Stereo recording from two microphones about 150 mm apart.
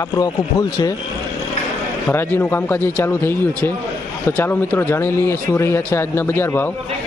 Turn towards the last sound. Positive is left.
turn(degrees=15)  # may be behind; listen again after turning